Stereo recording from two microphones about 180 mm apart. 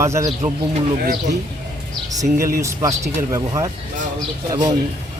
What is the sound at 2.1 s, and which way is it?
Speech, 20° right (ahead or behind).